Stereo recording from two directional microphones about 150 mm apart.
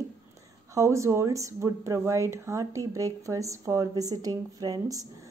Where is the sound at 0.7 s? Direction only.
20° right (ahead or behind).